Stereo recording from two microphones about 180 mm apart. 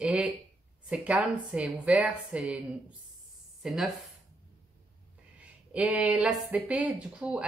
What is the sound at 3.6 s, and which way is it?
Speech, centre (ahead or behind).